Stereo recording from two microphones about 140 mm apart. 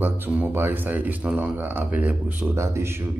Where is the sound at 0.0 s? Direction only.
15° right (ahead or behind).